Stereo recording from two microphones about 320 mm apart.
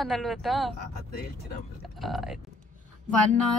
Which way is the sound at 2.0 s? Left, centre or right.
Centre.